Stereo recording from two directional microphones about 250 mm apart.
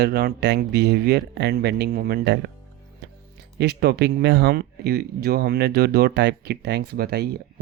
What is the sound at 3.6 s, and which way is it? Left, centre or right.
Speech, right.